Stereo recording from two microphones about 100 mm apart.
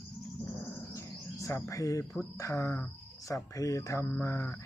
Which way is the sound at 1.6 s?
30° left (ahead or behind).